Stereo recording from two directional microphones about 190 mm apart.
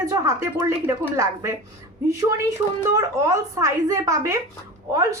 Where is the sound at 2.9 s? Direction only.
15° right (ahead or behind).